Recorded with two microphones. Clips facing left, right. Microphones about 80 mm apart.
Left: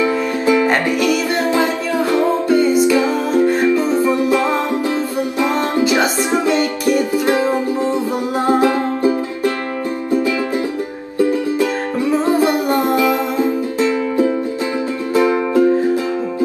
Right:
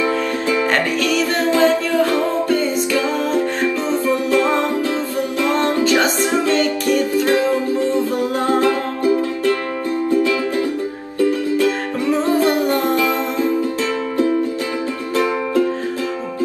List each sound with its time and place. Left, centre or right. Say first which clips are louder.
0.0 s music: left 2 dB; left
11.1 s music: left 1 dB; left